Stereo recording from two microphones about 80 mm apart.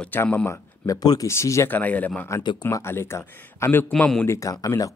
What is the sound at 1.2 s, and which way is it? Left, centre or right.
Speech, left.